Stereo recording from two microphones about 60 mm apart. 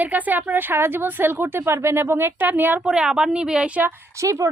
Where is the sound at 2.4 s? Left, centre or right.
Right.